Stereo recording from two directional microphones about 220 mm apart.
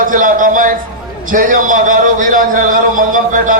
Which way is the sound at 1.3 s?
40° right (ahead or behind).